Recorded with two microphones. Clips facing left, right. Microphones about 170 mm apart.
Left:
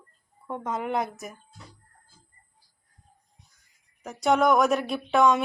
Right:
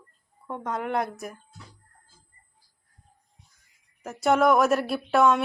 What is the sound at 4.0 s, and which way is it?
A woman's voice, 5° right (ahead or behind).